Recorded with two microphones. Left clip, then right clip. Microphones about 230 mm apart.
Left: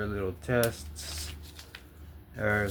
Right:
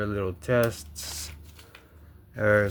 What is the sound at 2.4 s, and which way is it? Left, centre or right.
Speech, right.